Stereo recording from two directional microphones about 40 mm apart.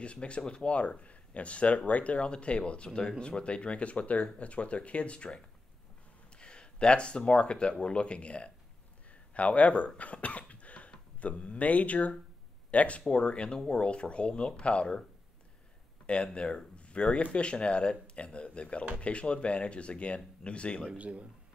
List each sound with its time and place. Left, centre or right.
0.0 s speech: left
9.1 s cough: left
11.1 s speech: left
16.1 s speech: left
20.9 s speech: right